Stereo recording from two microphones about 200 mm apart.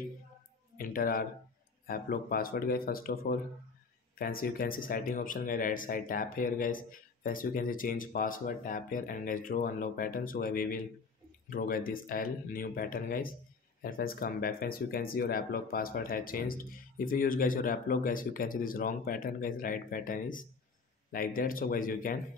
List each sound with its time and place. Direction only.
0.7 s speech: 45° left (ahead or behind)